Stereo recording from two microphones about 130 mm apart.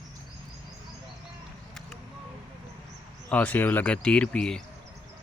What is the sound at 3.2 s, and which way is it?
Speech, 10° left (ahead or behind).